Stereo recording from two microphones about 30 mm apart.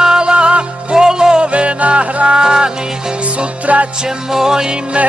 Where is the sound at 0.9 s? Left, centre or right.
Right.